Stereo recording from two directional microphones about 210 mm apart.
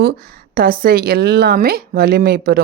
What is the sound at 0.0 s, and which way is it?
Speech, 45° right (ahead or behind).